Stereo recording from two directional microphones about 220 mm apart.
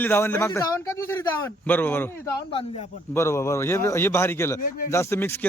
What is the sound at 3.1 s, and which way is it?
Speech, 10° left (ahead or behind).